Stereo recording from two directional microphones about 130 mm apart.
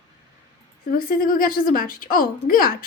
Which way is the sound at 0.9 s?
90° left.